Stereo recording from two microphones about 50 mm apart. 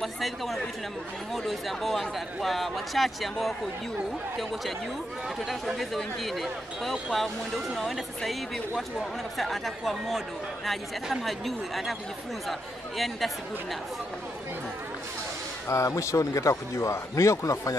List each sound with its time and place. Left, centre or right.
0.0 s speech: centre
5.4 s speech: centre
15.7 s a man's voice: left